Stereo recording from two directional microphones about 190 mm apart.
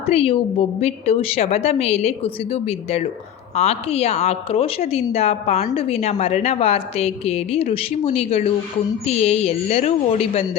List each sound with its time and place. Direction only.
0.0 s a woman's voice: 35° left (ahead or behind)